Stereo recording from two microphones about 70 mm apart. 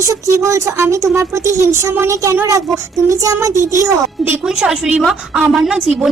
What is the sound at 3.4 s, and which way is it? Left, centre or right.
Speech, right.